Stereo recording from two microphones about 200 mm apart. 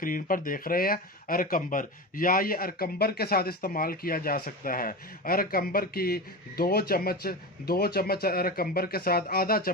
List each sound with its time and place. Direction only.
0.0 s speech: 45° left (ahead or behind)